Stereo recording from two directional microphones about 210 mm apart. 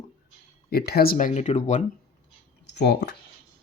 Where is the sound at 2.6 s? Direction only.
55° left (ahead or behind).